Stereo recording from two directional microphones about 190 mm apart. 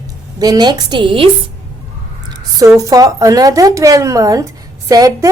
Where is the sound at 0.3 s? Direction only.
20° right (ahead or behind).